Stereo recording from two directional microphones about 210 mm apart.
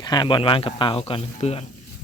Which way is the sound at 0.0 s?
20° left (ahead or behind).